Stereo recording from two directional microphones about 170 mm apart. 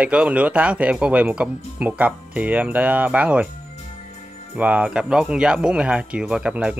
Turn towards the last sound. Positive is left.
turn(degrees=-5)  # may be behind; listen again after turning